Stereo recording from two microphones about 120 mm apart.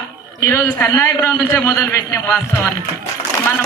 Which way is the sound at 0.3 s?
25° left (ahead or behind).